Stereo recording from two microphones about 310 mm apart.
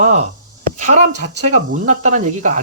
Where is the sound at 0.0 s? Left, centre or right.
Right.